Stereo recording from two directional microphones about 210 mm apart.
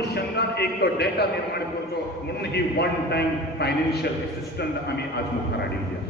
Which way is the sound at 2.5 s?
50° left (ahead or behind).